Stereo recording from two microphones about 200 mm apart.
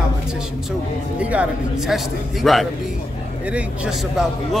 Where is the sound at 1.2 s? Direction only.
5° right (ahead or behind).